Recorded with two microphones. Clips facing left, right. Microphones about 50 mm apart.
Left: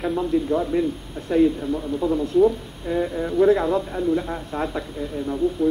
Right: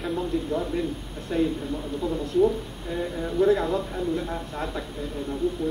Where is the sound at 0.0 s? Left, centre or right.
Centre.